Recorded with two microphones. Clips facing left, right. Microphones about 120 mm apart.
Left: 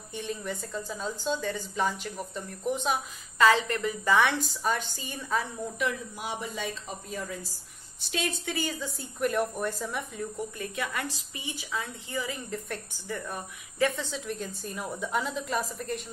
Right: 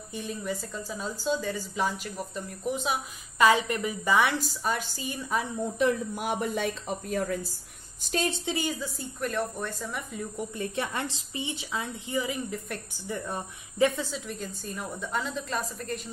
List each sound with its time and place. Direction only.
0.1 s a woman's voice: 5° right (ahead or behind)
3.3 s a woman's voice: 15° right (ahead or behind)
6.1 s speech: 55° right (ahead or behind)
8.0 s a woman's voice: 40° right (ahead or behind)
8.3 s speech: 20° right (ahead or behind)
8.8 s a woman's voice: 5° left (ahead or behind)
10.6 s a woman's voice: 30° right (ahead or behind)
14.1 s a woman's voice: centre (ahead or behind)